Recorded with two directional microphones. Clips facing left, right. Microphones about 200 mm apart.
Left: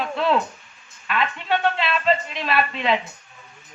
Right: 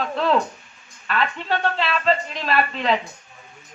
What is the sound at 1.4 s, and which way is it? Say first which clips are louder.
Speech: left 1 dB; 40° right (ahead or behind).